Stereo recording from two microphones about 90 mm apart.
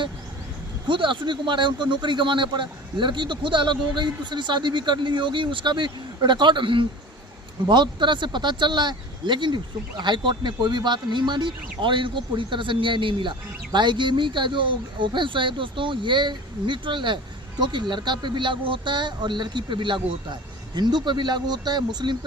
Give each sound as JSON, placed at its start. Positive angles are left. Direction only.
{"t": 0.9, "sound": "speech", "side_deg": -65}